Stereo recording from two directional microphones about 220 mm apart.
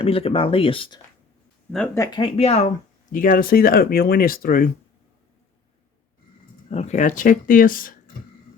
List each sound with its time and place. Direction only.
0.0 s speech: 25° left (ahead or behind)
2.0 s speech: 20° left (ahead or behind)
3.1 s speech: 40° left (ahead or behind)
6.7 s speech: 30° left (ahead or behind)